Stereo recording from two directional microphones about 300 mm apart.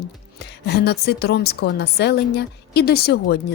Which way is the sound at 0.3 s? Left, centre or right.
Left.